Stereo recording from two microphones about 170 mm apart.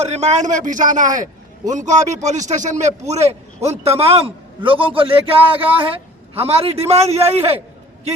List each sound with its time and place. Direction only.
0.0 s a man's voice: 40° right (ahead or behind)